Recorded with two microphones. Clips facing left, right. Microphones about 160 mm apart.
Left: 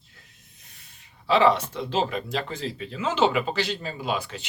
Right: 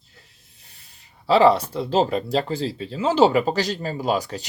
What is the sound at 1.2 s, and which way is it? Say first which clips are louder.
Speech: right 4 dB; 35° right (ahead or behind).